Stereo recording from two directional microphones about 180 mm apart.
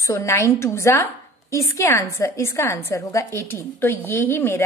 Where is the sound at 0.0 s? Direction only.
15° left (ahead or behind).